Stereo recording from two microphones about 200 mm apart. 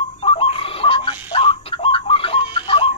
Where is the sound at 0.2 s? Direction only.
30° left (ahead or behind).